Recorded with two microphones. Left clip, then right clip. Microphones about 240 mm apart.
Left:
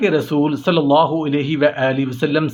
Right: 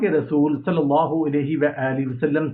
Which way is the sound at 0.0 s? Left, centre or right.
Left.